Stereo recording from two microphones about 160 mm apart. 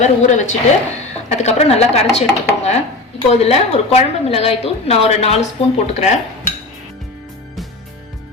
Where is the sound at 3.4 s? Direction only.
40° left (ahead or behind).